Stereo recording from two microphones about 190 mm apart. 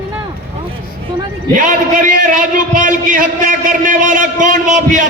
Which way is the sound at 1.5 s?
45° right (ahead or behind).